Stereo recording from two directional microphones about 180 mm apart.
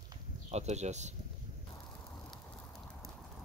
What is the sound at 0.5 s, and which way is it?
Speech, 40° right (ahead or behind).